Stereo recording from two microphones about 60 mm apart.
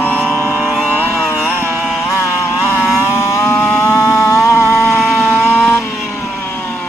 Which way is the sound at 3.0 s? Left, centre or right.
Left.